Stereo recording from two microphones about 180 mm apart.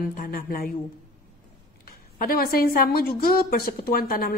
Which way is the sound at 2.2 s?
55° left (ahead or behind).